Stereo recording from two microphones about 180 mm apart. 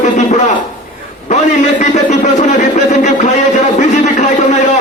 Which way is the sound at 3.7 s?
40° left (ahead or behind).